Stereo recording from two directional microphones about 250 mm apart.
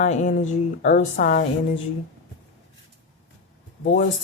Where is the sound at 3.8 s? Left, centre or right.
Left.